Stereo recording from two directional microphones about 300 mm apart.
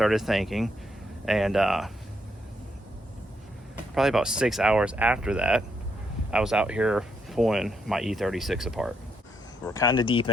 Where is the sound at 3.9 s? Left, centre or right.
Centre.